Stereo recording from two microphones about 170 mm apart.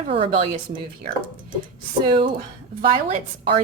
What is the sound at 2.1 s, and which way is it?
A woman's voice, 30° right (ahead or behind).